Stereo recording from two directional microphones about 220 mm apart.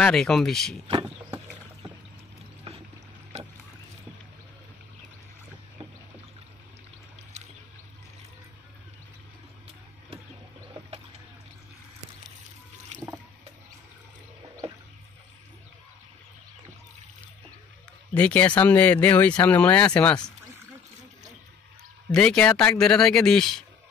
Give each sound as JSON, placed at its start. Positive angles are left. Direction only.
{"t": 0.0, "sound": "a man's voice", "side_deg": 0}
{"t": 3.3, "sound": "a sound", "side_deg": -30}
{"t": 12.9, "sound": "boat", "side_deg": -30}
{"t": 18.1, "sound": "speech", "side_deg": 5}
{"t": 22.1, "sound": "a man's voice", "side_deg": 5}